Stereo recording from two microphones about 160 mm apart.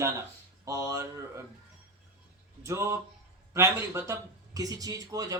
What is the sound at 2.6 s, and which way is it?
Speech, 20° right (ahead or behind).